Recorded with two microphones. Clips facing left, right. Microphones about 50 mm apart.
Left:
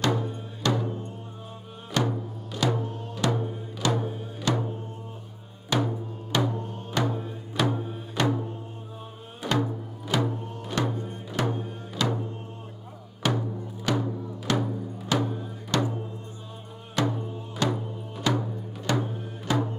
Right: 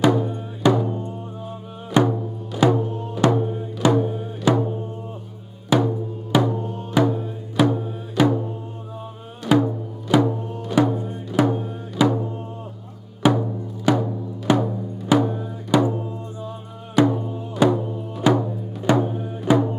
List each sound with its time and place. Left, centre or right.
0.0 s music: centre
2.0 s music: centre
3.2 s music: right
3.8 s music: right
5.7 s music: centre
9.5 s music: centre
10.1 s music: centre
13.2 s music: centre
16.9 s music: centre